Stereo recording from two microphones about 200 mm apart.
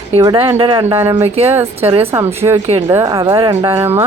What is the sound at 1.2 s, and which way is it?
Speech, 30° right (ahead or behind).